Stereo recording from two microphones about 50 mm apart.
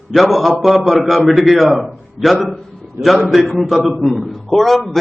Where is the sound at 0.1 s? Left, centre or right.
Centre.